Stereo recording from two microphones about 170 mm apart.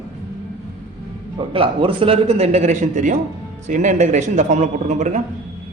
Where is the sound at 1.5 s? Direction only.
30° right (ahead or behind).